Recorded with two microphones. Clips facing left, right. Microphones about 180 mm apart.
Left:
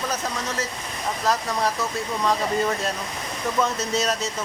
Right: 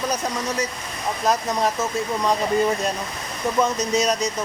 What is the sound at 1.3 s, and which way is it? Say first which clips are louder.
Speech: right 2 dB; 20° right (ahead or behind).